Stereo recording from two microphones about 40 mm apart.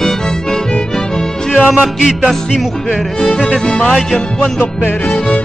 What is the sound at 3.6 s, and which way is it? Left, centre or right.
Music, left.